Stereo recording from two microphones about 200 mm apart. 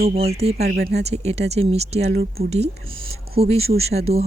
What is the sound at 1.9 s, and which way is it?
Speech, 50° right (ahead or behind).